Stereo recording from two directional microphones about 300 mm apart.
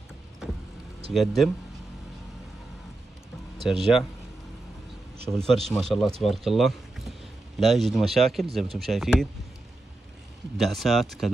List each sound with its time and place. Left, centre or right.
1.1 s speech: centre
3.5 s speech: centre
5.5 s speech: centre
10.6 s speech: centre